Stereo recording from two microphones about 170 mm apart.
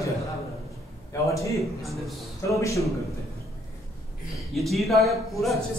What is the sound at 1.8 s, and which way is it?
Speech, centre (ahead or behind).